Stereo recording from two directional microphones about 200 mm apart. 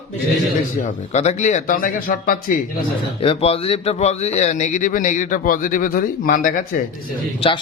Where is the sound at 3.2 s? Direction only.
30° left (ahead or behind); by 6.5 s 45° left (ahead or behind).